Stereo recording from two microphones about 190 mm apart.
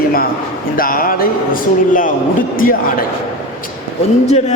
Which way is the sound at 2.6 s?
45° left (ahead or behind).